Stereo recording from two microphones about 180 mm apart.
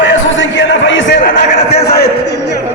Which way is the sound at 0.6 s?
90° left.